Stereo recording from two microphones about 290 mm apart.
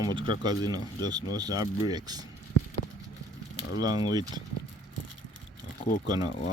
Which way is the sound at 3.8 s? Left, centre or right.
Centre.